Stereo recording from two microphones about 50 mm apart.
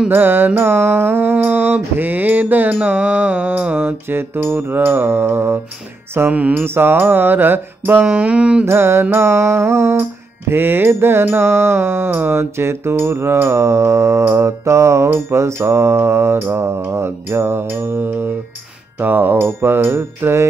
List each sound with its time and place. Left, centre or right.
0.1 s mantra: right
3.8 s mantra: right
6.3 s mantra: right
6.6 s mantra: right
8.1 s mantra: right
8.6 s mantra: right
10.5 s mantra: right